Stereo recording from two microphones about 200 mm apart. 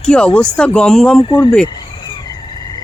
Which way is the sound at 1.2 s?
20° left (ahead or behind).